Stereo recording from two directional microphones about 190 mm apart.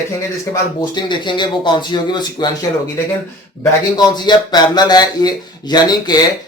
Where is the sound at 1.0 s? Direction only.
25° left (ahead or behind).